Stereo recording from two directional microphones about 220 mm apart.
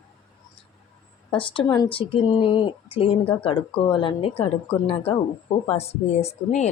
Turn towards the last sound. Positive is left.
turn(degrees=30)  # may be behind; listen again after turning